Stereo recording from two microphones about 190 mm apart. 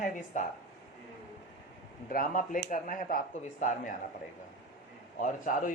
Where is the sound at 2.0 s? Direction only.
45° left (ahead or behind).